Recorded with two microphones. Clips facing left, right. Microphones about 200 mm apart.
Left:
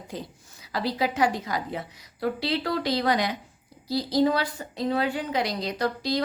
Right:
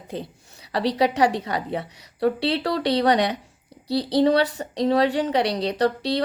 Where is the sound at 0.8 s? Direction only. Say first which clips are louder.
Right 5 dB; 75° right (ahead or behind).